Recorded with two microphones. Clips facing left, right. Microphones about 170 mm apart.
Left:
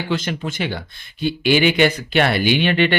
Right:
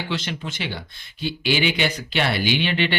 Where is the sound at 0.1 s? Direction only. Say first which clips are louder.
Left 5 dB; 50° left (ahead or behind).